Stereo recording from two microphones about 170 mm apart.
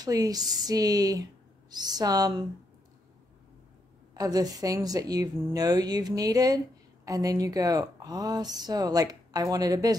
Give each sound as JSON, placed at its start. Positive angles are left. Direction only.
{"t": 0.0, "sound": "speech", "side_deg": -20}
{"t": 4.1, "sound": "speech", "side_deg": -20}